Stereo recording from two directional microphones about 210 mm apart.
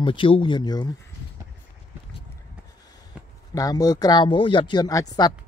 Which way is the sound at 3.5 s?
15° left (ahead or behind).